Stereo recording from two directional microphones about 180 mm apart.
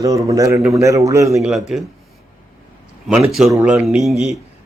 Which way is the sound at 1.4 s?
Centre (ahead or behind).